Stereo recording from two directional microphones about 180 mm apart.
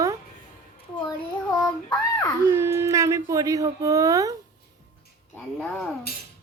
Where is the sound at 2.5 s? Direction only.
15° right (ahead or behind).